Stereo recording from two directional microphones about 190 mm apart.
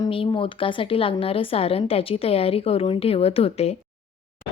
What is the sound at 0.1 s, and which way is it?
Speech, 30° left (ahead or behind).